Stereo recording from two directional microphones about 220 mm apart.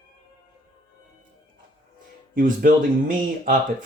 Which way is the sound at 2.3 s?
40° right (ahead or behind).